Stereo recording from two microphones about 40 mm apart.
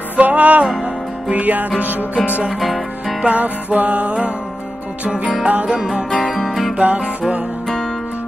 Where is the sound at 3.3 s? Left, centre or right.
Right.